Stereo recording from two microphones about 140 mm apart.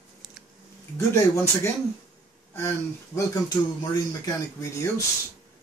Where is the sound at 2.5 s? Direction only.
20° left (ahead or behind).